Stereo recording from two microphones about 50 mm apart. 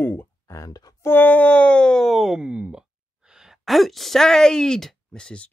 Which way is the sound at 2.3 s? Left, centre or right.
Centre.